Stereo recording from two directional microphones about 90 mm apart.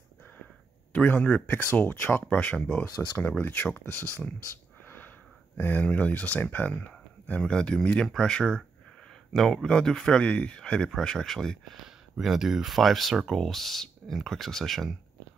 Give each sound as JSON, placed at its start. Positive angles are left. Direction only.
{"t": 0.9, "sound": "speech", "side_deg": 20}
{"t": 4.8, "sound": "a sound", "side_deg": 20}
{"t": 5.6, "sound": "speech", "side_deg": 20}